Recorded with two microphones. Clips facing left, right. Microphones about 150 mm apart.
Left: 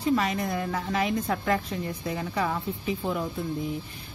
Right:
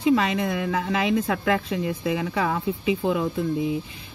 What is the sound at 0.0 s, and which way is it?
Speech, 85° right.